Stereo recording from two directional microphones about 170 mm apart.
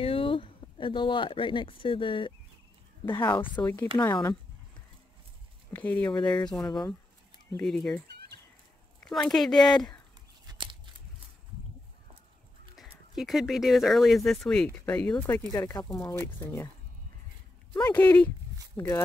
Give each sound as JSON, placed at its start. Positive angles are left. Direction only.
{"t": 0.0, "sound": "speech", "side_deg": 30}
{"t": 3.6, "sound": "speech", "side_deg": 15}
{"t": 4.1, "sound": "speech", "side_deg": 25}
{"t": 5.7, "sound": "speech", "side_deg": 10}
{"t": 6.6, "sound": "speech", "side_deg": 25}
{"t": 7.6, "sound": "speech", "side_deg": 5}
{"t": 9.0, "sound": "speech", "side_deg": 5}
{"t": 10.4, "sound": "a sound", "side_deg": -25}
{"t": 12.7, "sound": "speech", "side_deg": 0}
{"t": 17.9, "sound": "speech", "side_deg": 10}